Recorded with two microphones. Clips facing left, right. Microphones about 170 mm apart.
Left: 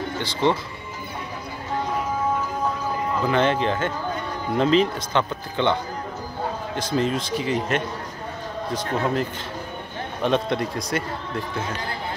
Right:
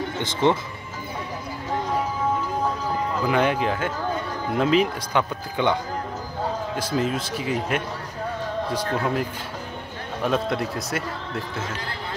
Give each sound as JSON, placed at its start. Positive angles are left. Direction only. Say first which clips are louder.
{"t": 0.2, "sound": "speech", "louder": "right 1 dB", "side_deg": -20}
{"t": 3.3, "sound": "speech", "louder": "left 1 dB", "side_deg": -10}
{"t": 6.8, "sound": "speech", "louder": "left 3 dB", "side_deg": -5}